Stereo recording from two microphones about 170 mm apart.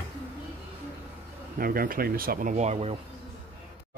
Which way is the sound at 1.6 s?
60° right (ahead or behind).